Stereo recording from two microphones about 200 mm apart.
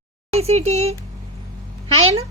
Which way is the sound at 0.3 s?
30° right (ahead or behind).